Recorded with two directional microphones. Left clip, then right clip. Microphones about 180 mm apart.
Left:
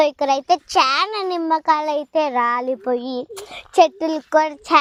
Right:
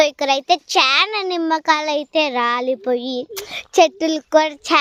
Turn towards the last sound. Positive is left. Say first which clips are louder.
# right 1 dB
turn(degrees=-15)  # may be behind; listen again after turning